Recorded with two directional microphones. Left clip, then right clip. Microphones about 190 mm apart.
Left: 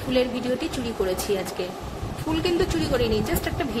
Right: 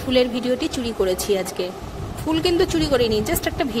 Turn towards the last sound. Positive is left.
turn(degrees=-45)  # may be behind; listen again after turning